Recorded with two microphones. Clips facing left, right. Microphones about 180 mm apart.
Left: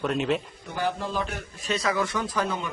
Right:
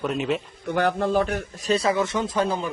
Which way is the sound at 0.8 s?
65° right (ahead or behind).